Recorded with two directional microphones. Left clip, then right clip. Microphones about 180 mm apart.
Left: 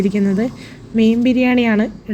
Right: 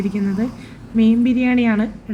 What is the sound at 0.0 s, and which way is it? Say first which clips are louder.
Speech: left 5 dB; 20° left (ahead or behind).